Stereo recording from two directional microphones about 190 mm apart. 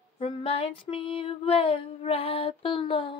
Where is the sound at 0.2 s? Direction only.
30° left (ahead or behind).